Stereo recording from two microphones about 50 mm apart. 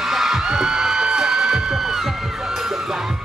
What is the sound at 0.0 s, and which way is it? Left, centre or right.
Music, centre.